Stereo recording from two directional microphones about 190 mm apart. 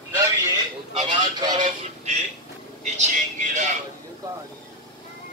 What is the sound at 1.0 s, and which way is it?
Speech, 20° right (ahead or behind).